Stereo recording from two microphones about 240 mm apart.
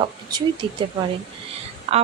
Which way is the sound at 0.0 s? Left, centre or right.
Centre.